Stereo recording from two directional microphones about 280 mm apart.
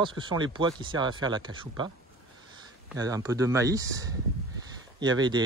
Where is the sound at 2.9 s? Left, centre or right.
Centre.